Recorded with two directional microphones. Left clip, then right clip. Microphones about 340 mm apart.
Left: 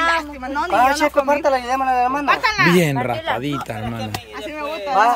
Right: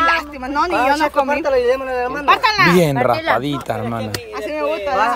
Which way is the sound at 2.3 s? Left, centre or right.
Right.